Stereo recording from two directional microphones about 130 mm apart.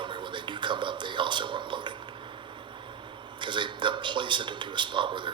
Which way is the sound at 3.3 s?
40° right (ahead or behind).